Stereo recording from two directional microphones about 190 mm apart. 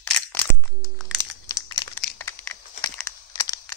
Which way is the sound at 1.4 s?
20° left (ahead or behind).